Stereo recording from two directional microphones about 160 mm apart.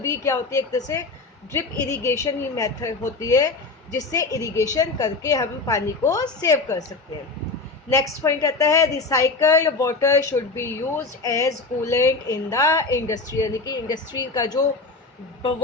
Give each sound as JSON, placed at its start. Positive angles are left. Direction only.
{"t": 0.0, "sound": "a woman's voice", "side_deg": 20}
{"t": 7.9, "sound": "a woman's voice", "side_deg": 20}